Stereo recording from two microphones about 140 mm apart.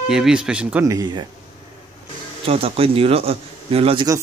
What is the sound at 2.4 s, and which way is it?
Speech, 45° right (ahead or behind).